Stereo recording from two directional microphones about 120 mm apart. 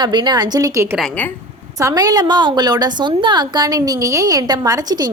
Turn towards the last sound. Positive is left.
turn(degrees=-35)  # may be behind; listen again after turning